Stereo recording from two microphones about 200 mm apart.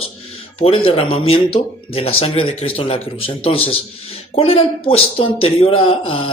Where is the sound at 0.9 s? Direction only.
30° left (ahead or behind).